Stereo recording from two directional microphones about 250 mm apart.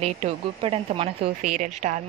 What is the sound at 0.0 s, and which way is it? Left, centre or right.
A woman's voice, right.